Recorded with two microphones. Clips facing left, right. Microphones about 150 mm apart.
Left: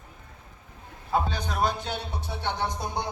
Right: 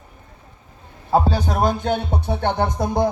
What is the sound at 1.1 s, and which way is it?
Music, 35° right (ahead or behind).